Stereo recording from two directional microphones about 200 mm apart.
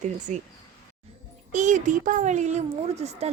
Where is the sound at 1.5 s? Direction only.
40° right (ahead or behind).